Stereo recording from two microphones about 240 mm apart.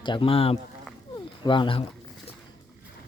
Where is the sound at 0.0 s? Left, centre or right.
Left.